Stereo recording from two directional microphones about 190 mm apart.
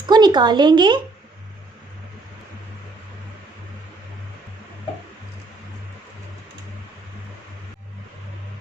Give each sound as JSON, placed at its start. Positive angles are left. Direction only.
{"t": 0.1, "sound": "speech", "side_deg": -20}